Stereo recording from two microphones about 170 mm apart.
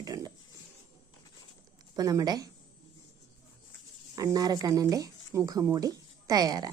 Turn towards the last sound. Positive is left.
turn(degrees=-25)  # may be behind; listen again after turning